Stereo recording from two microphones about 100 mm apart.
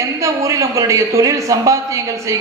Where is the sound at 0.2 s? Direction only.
30° right (ahead or behind).